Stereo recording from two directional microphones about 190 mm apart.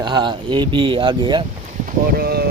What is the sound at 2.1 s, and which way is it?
Speech, 55° right (ahead or behind).